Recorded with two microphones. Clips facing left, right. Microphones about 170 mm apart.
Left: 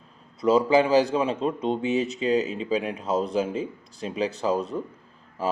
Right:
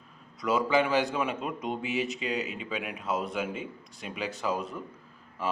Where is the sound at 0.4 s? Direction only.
35° left (ahead or behind).